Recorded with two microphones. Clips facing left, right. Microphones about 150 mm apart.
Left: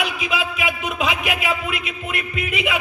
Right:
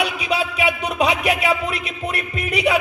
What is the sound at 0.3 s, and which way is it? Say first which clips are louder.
Music: right 3 dB; 35° right (ahead or behind).